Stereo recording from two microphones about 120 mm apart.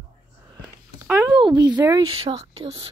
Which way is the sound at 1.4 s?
35° right (ahead or behind).